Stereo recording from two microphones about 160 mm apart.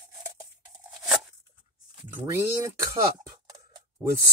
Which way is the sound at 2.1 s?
15° right (ahead or behind).